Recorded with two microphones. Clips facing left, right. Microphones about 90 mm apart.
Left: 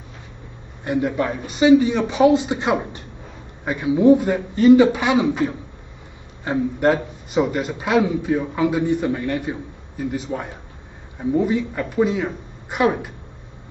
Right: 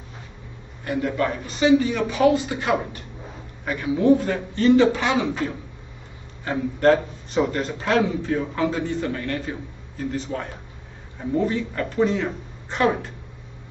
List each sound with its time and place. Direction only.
0.8 s a man's voice: 20° left (ahead or behind)